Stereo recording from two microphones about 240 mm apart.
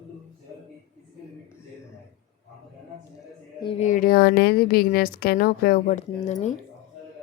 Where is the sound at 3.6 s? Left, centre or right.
Left.